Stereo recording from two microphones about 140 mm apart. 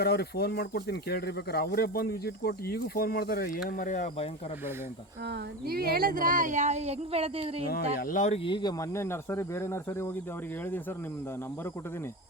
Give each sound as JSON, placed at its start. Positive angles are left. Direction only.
{"t": 0.3, "sound": "speech", "side_deg": 90}
{"t": 3.8, "sound": "speech", "side_deg": 60}
{"t": 5.6, "sound": "speech", "side_deg": -90}
{"t": 7.7, "sound": "speech", "side_deg": 90}
{"t": 8.3, "sound": "speech", "side_deg": 35}
{"t": 8.8, "sound": "speech", "side_deg": 20}